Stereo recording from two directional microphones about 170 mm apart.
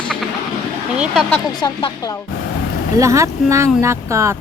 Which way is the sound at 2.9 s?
20° right (ahead or behind).